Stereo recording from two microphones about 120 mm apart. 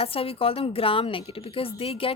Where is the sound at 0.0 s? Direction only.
50° left (ahead or behind).